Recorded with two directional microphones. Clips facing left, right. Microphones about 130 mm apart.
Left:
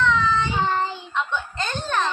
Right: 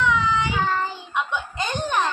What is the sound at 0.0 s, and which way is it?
Child singing, 10° right (ahead or behind).